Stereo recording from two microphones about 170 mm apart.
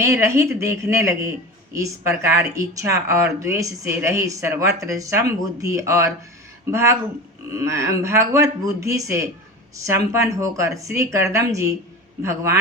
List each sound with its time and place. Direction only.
0.0 s a woman's voice: 15° right (ahead or behind)